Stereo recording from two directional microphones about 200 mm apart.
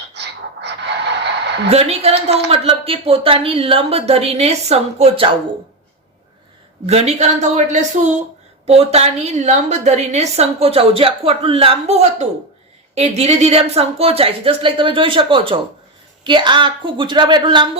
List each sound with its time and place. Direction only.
0.1 s a sound: 60° right (ahead or behind)
1.7 s a woman's voice: 30° right (ahead or behind)
6.8 s a woman's voice: 35° right (ahead or behind)